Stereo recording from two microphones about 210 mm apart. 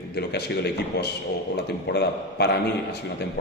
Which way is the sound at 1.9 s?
50° left (ahead or behind).